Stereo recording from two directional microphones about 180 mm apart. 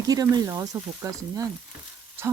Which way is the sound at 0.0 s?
20° right (ahead or behind).